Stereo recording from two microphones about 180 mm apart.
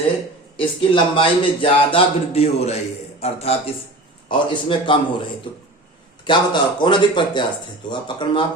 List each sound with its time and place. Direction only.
0.6 s speech: 30° left (ahead or behind)
6.2 s speech: 25° left (ahead or behind)